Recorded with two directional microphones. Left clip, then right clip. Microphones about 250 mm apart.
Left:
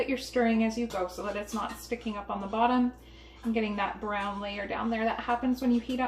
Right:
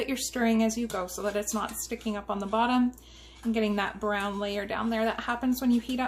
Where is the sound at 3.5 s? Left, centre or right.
Right.